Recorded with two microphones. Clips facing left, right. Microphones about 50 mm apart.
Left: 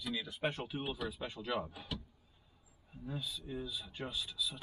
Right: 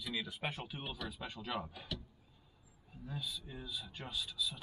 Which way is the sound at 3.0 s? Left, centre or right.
Centre.